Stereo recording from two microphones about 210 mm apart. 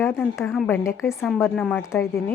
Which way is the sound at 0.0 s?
10° left (ahead or behind).